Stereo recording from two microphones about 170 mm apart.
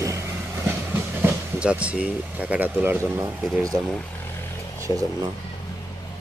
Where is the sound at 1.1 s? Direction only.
10° right (ahead or behind).